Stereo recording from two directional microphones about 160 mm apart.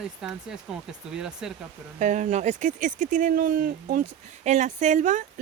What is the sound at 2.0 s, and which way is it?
Speech, 50° right (ahead or behind).